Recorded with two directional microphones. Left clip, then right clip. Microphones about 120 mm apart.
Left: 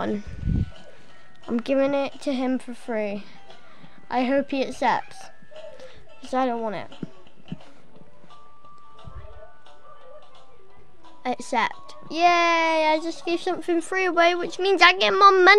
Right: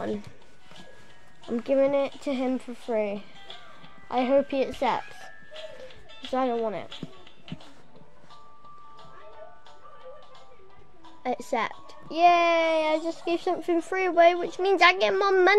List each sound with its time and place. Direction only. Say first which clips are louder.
1.5 s a child's voice: left 1 dB; 60° left (ahead or behind); by 7.5 s 35° left (ahead or behind)
11.2 s a child's voice: left 4 dB; 45° left (ahead or behind)